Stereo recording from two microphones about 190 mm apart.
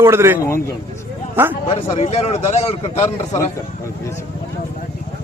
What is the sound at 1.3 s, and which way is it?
Speech, 10° right (ahead or behind).